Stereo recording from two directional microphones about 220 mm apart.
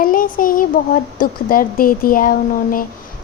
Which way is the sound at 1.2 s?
40° left (ahead or behind).